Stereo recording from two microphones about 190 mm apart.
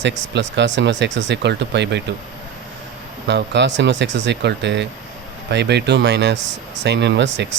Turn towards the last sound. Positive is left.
turn(degrees=-65)  # may be behind; listen again after turning